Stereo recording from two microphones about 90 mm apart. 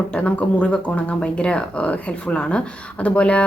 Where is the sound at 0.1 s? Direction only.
15° left (ahead or behind).